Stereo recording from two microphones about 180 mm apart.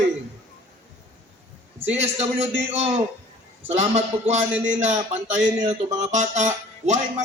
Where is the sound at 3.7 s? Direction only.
40° right (ahead or behind).